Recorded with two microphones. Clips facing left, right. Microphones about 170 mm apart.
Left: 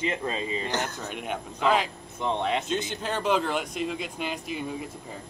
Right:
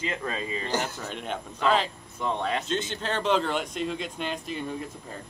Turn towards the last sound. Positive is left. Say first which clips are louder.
# even
turn(degrees=10)  # may be behind; listen again after turning